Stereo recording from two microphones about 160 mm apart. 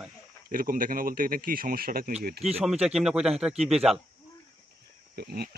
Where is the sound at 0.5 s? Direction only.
60° right (ahead or behind).